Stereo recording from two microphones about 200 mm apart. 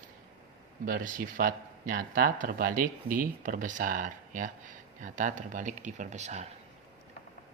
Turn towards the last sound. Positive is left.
turn(degrees=-35)  # may be behind; listen again after turning